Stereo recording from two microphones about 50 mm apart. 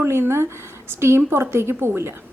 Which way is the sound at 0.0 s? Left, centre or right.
Right.